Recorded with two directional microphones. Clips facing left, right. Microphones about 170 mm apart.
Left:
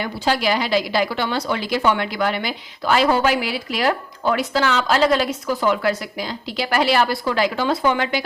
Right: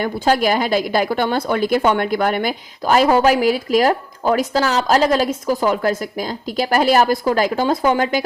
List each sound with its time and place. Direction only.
0.0 s a woman's voice: 45° right (ahead or behind)